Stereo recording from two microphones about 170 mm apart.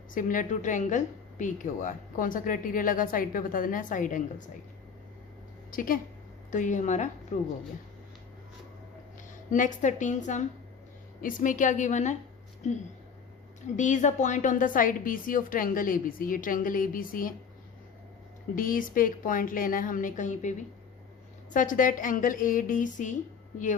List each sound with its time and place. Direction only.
0.1 s a woman's voice: 50° left (ahead or behind)
5.7 s a woman's voice: 55° left (ahead or behind)
9.5 s a woman's voice: 50° left (ahead or behind)
18.5 s a woman's voice: 55° left (ahead or behind)